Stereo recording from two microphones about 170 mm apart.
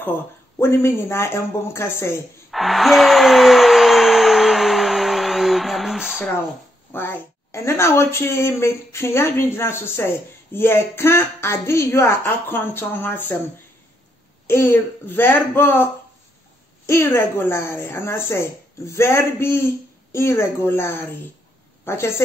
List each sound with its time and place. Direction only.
0.6 s a woman's voice: 15° left (ahead or behind)
2.5 s music: centre (ahead or behind)
6.9 s a woman's voice: 15° left (ahead or behind)
14.5 s a woman's voice: 15° left (ahead or behind)